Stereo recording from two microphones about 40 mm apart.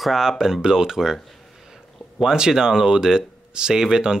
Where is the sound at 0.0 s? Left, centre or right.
Centre.